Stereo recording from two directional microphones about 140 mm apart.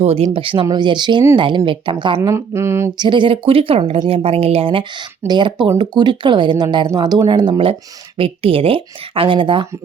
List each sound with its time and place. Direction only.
0.0 s speech: 45° right (ahead or behind)
2.3 s speech: 20° right (ahead or behind)
3.0 s speech: 35° right (ahead or behind)